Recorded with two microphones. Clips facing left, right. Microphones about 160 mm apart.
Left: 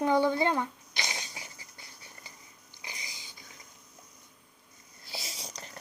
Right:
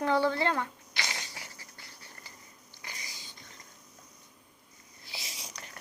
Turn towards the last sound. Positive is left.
turn(degrees=30)  # may be behind; listen again after turning